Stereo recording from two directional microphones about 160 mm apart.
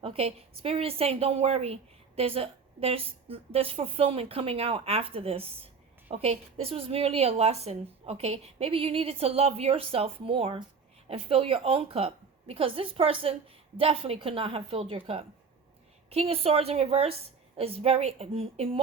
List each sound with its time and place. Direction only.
0.0 s a woman's voice: 35° right (ahead or behind)